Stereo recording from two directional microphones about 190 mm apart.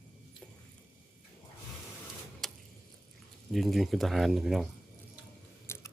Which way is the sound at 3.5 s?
Centre (ahead or behind).